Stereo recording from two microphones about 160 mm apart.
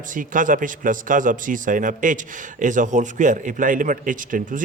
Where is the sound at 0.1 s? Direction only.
55° right (ahead or behind).